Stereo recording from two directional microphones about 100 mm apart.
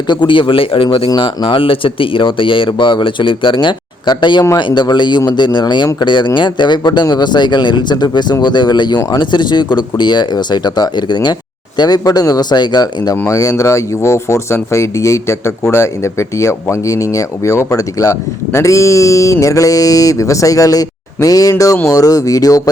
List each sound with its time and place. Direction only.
0.1 s speech: 50° left (ahead or behind)
1.1 s speech: 50° left (ahead or behind)
13.1 s speech: 30° left (ahead or behind)